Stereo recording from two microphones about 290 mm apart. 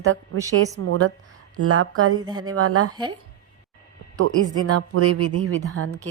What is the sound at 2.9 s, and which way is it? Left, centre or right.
Speech, centre.